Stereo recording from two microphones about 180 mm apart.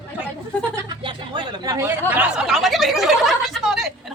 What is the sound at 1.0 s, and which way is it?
Speech, 25° right (ahead or behind).